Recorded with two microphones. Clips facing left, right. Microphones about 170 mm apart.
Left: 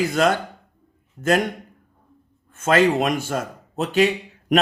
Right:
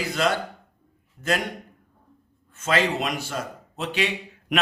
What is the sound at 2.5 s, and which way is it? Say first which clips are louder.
A man's voice: left 6 dB; 50° left (ahead or behind).